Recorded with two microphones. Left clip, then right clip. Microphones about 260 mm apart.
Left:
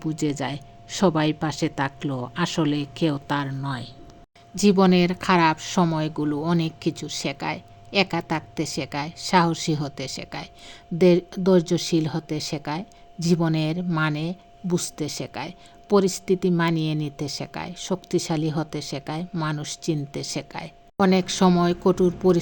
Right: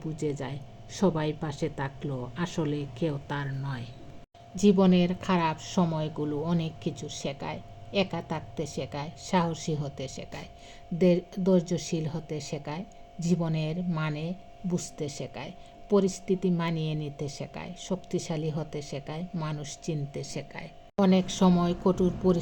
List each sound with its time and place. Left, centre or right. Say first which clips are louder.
0.0 s speech: left 6 dB; left